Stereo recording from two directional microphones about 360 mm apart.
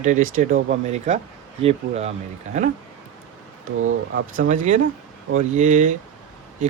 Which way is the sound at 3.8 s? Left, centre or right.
Right.